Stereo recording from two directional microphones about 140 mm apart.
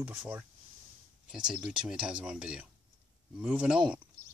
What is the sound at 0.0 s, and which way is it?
Speech, 5° right (ahead or behind).